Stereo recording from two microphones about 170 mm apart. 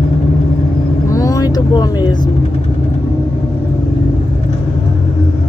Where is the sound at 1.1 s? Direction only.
20° left (ahead or behind).